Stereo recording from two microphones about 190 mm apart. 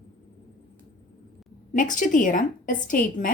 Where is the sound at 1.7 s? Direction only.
45° left (ahead or behind).